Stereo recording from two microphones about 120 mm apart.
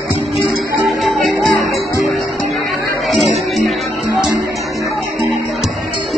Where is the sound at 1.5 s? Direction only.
Centre (ahead or behind).